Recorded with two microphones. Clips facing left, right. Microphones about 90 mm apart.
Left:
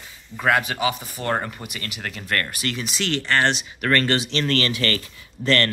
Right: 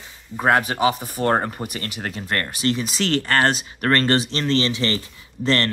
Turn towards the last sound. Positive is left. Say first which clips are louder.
# even
turn(degrees=-30)  # may be behind; listen again after turning